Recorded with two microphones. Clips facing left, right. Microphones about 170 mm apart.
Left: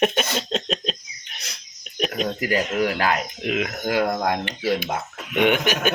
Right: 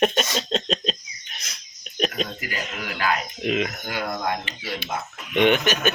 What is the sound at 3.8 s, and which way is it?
Speech, 60° left (ahead or behind).